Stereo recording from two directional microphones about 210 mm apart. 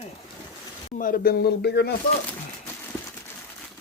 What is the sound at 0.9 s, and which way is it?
Speech, 40° left (ahead or behind).